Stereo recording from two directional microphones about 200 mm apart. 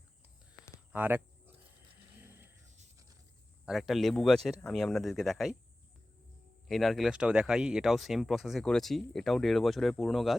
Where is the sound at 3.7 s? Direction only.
Centre (ahead or behind).